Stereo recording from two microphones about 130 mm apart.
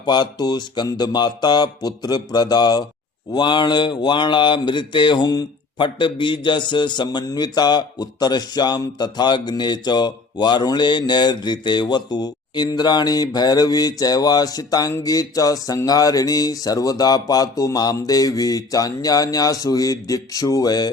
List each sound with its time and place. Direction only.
0.0 s mantra: 35° left (ahead or behind)